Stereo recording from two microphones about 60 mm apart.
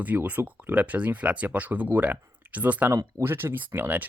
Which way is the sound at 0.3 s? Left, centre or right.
Right.